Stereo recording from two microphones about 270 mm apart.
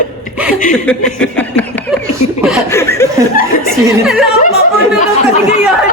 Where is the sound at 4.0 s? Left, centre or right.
Centre.